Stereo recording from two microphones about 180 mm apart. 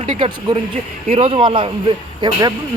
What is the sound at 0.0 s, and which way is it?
A man's voice, 30° right (ahead or behind).